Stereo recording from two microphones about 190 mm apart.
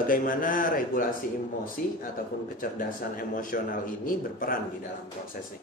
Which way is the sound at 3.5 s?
50° left (ahead or behind).